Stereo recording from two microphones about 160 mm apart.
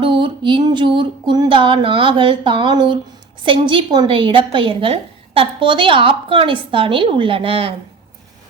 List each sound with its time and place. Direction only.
0.0 s a woman's voice: 30° right (ahead or behind)